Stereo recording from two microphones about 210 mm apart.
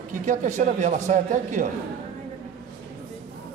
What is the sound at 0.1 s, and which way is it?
A man's voice, 35° right (ahead or behind).